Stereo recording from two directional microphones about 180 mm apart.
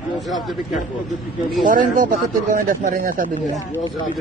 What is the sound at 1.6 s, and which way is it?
Speech, 50° right (ahead or behind).